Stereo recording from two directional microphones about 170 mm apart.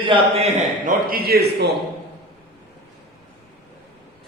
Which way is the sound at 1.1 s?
60° right (ahead or behind).